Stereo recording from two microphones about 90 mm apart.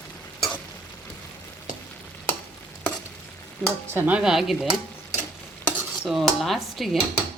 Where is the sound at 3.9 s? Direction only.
20° right (ahead or behind).